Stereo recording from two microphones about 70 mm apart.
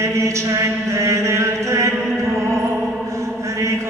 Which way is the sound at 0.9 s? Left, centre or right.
Right.